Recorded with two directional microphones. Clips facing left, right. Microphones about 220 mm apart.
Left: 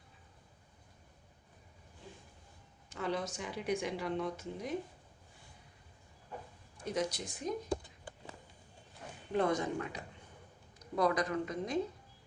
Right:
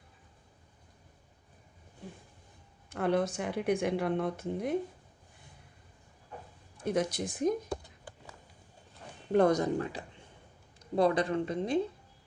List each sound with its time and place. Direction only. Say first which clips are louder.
2.0 s a sound: right 6 dB; 55° right (ahead or behind)
2.9 s speech: right 8 dB; 55° right (ahead or behind)
6.8 s speech: right 5 dB; 55° right (ahead or behind)
9.3 s speech: right 7 dB; 40° right (ahead or behind)